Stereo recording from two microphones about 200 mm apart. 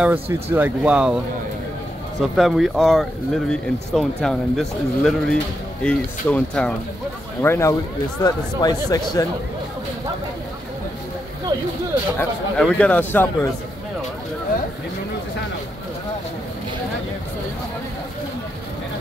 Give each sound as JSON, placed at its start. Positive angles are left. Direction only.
{"t": 0.0, "sound": "speech", "side_deg": -10}
{"t": 2.3, "sound": "a man's voice", "side_deg": 0}
{"t": 12.2, "sound": "a man's voice", "side_deg": 5}